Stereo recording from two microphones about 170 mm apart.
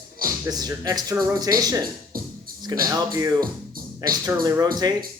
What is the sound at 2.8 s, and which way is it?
Speech, 20° right (ahead or behind).